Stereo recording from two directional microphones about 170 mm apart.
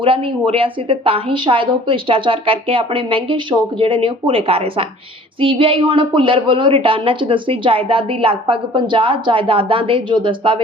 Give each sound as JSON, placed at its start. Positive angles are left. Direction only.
{"t": 0.0, "sound": "a woman's voice", "side_deg": -30}